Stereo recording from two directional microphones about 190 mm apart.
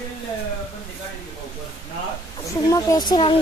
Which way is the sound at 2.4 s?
15° left (ahead or behind).